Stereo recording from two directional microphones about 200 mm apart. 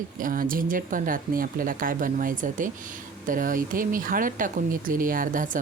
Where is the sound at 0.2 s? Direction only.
45° right (ahead or behind).